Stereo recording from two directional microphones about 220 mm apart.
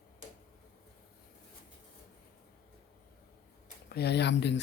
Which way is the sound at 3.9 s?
50° left (ahead or behind).